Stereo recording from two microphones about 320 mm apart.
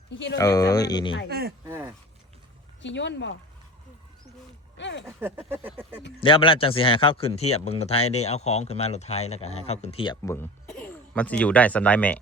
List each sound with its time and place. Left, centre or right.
0.1 s speech: left
0.3 s speech: centre
1.3 s speech: right
1.6 s a sound: centre
2.8 s speech: left
4.8 s speech: left
5.0 s a sound: centre
6.1 s speech: centre